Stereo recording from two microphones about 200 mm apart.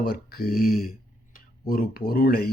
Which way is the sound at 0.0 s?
50° left (ahead or behind).